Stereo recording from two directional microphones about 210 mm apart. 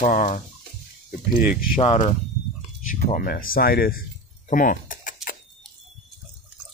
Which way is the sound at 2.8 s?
40° left (ahead or behind).